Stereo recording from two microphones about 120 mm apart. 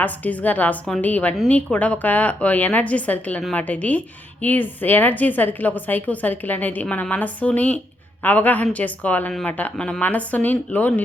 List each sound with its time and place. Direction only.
0.0 s a woman's voice: 15° left (ahead or behind)